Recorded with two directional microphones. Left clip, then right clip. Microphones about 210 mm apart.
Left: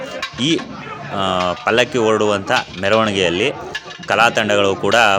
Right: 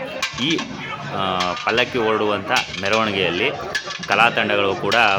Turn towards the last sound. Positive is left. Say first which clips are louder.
# left 3 dB
turn(degrees=45)  # may be behind; listen again after turning